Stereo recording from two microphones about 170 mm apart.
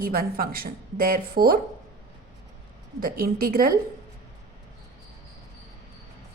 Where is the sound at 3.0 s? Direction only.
60° right (ahead or behind).